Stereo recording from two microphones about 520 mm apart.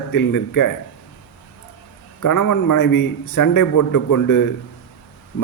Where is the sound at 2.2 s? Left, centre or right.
Left.